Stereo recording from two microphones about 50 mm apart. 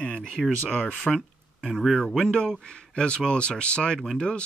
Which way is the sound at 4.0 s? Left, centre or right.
Centre.